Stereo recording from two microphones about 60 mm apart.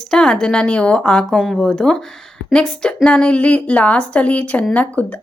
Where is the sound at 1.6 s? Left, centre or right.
Centre.